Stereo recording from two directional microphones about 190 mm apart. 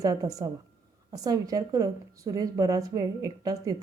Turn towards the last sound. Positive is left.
turn(degrees=-20)  # may be behind; listen again after turning